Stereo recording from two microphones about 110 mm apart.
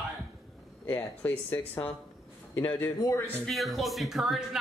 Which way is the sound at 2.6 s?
15° left (ahead or behind).